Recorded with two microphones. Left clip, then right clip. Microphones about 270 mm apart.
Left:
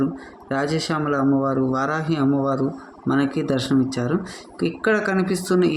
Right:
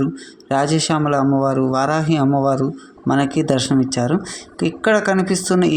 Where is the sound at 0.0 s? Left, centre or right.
Right.